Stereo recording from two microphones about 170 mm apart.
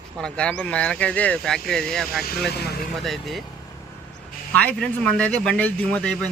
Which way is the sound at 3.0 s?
Centre (ahead or behind).